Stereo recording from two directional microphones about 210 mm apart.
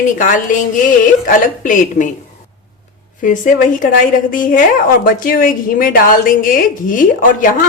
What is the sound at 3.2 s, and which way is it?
A woman's voice, 40° left (ahead or behind).